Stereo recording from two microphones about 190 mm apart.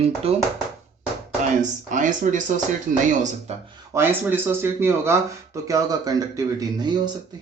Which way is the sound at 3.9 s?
10° right (ahead or behind).